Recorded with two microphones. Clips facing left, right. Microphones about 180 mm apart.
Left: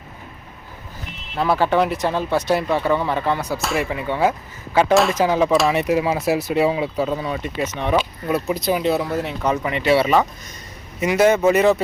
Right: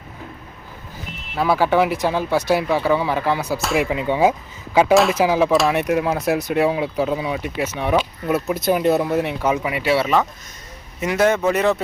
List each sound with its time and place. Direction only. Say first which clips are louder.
1.4 s speech: right 1 dB; 5° right (ahead or behind)
3.8 s speech: right 4 dB; 15° right (ahead or behind); by 11.8 s centre (ahead or behind)